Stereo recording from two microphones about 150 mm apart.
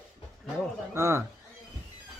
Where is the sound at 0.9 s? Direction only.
15° right (ahead or behind).